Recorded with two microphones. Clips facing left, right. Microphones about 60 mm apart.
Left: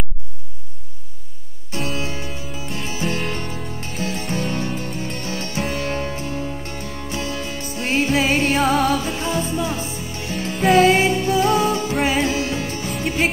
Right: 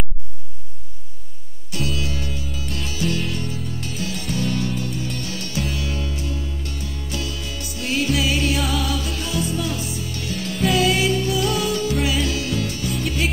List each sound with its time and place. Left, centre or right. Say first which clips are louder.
2.0 s music: left 1 dB; left